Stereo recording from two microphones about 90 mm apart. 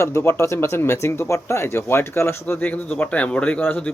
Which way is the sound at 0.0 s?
30° left (ahead or behind).